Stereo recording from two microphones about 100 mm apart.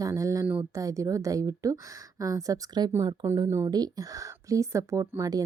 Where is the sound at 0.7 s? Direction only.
35° right (ahead or behind).